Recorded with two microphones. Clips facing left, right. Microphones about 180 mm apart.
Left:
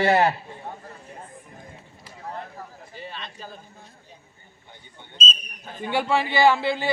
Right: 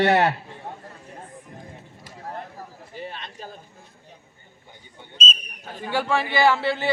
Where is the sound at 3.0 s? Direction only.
55° right (ahead or behind).